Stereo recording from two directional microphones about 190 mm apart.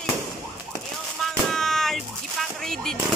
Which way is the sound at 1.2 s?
Centre (ahead or behind).